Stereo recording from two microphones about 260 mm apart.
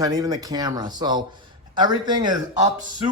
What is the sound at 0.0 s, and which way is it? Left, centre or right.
Speech, centre.